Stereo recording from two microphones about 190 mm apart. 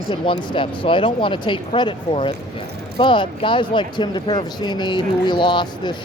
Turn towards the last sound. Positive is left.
turn(degrees=25)  # may be behind; listen again after turning